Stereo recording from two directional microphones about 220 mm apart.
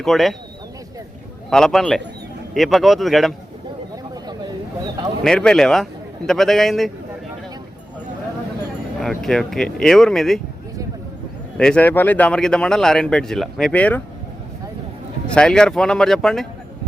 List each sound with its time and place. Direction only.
0.0 s speech: centre (ahead or behind)
1.5 s speech: centre (ahead or behind)
3.9 s a sound: 15° right (ahead or behind)
5.2 s speech: 5° left (ahead or behind)
9.0 s speech: centre (ahead or behind)
11.5 s speech: 5° left (ahead or behind)
15.4 s speech: 5° left (ahead or behind)